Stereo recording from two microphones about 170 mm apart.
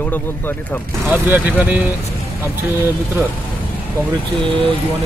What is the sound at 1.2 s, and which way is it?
Speech, 10° right (ahead or behind).